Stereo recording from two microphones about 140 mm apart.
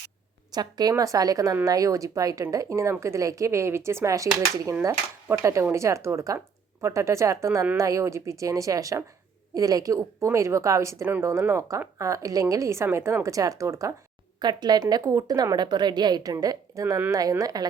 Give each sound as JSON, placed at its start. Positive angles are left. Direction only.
{"t": 0.5, "sound": "a woman's voice", "side_deg": -30}